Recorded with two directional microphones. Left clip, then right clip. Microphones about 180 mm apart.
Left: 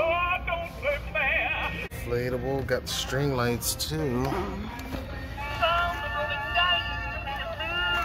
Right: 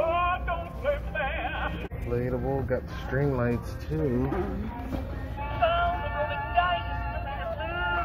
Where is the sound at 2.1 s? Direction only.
30° left (ahead or behind).